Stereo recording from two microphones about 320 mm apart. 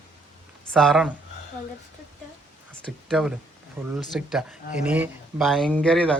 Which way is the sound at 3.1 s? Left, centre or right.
Centre.